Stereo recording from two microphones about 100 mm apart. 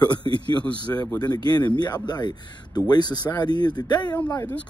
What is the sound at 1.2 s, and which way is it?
Speech, 45° left (ahead or behind).